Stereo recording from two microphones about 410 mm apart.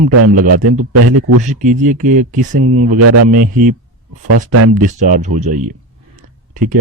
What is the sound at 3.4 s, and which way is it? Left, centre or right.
Speech, centre.